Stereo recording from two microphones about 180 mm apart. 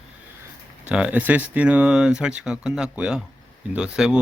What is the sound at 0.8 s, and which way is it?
Speech, 5° right (ahead or behind).